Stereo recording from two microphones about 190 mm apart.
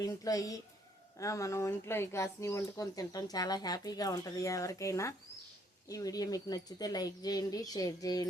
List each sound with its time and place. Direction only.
0.0 s speech: 20° left (ahead or behind)